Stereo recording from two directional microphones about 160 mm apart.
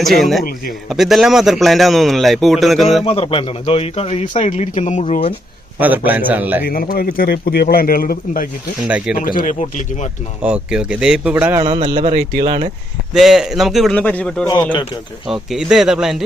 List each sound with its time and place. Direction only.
0.0 s speech: centre (ahead or behind)
3.0 s speech: 35° left (ahead or behind)
5.8 s speech: 10° right (ahead or behind)
6.7 s a man's voice: 65° left (ahead or behind)
10.4 s speech: 5° right (ahead or behind)
11.6 s a man's voice: 30° right (ahead or behind)
12.1 s speech: 65° right (ahead or behind)
12.5 s a man's voice: 35° right (ahead or behind)
13.1 s speech: centre (ahead or behind)